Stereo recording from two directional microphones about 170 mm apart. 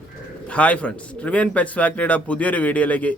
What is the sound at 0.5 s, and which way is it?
A man's voice, 10° left (ahead or behind).